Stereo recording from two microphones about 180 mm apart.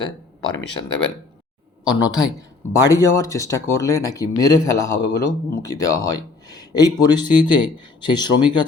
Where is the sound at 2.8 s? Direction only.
15° left (ahead or behind).